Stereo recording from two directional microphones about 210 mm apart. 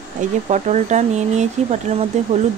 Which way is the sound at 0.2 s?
35° right (ahead or behind).